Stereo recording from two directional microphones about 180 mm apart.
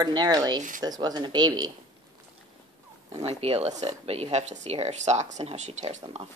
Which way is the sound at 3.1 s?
35° right (ahead or behind).